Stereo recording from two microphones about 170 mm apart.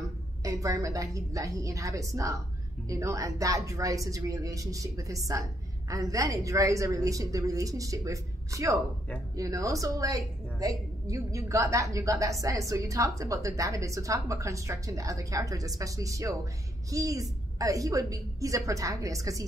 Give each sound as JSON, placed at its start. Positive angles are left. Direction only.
{"t": 0.4, "sound": "a woman's voice", "side_deg": -20}